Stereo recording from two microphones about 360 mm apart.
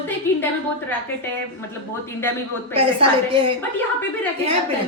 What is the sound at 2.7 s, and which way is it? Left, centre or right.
Speech, centre.